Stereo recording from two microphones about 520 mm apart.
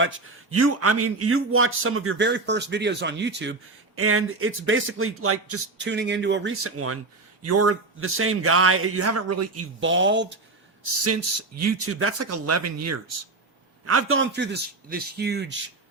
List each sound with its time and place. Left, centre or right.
0.5 s a man's voice: right